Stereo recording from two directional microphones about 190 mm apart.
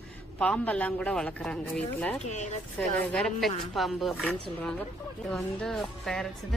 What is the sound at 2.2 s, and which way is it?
Speech, 40° left (ahead or behind).